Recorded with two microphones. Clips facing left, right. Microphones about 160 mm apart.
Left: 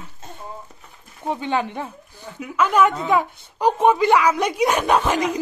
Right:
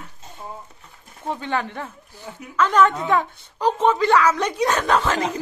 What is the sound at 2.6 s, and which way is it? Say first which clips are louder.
Speech: even; 10° left (ahead or behind).